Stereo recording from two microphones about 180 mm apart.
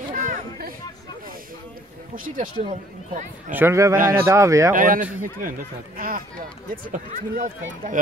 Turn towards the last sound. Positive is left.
turn(degrees=-45)  # may be behind; listen again after turning